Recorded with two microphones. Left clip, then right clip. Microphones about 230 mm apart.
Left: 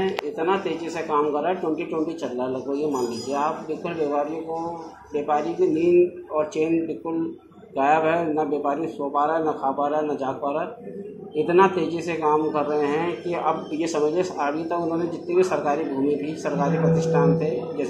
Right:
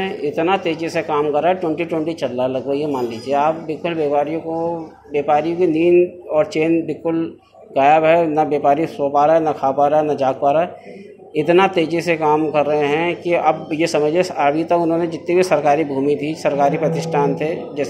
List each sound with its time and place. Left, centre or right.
0.5 s a man's voice: right